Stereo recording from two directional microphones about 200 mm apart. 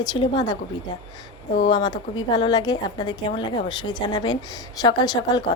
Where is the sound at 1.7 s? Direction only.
20° left (ahead or behind).